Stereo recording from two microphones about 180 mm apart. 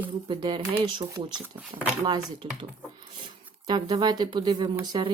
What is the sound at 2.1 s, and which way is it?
Speech, 25° right (ahead or behind).